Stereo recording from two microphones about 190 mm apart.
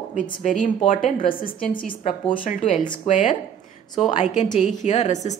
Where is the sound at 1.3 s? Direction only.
25° left (ahead or behind).